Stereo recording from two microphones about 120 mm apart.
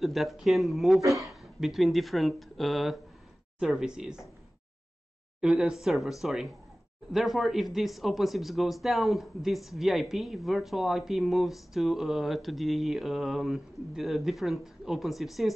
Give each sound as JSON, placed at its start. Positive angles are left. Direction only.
{"t": 0.0, "sound": "speech", "side_deg": 0}
{"t": 1.0, "sound": "speech", "side_deg": -25}
{"t": 1.3, "sound": "speech", "side_deg": 0}
{"t": 5.4, "sound": "speech", "side_deg": -5}